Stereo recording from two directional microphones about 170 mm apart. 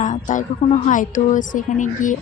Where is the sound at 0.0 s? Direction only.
45° left (ahead or behind).